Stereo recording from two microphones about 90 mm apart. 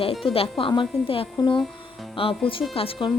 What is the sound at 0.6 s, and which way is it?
A woman's voice, 70° left (ahead or behind).